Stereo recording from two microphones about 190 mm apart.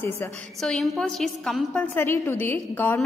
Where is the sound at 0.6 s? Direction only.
Centre (ahead or behind).